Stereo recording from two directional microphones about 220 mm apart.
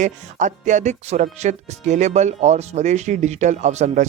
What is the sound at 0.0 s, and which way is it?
Speech, 35° right (ahead or behind).